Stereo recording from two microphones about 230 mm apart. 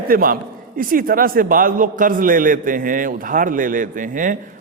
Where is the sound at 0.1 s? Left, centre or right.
Right.